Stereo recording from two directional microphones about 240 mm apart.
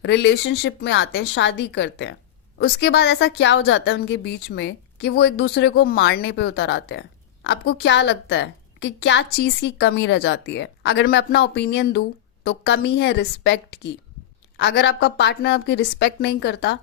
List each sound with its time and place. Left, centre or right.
0.0 s a woman's voice: left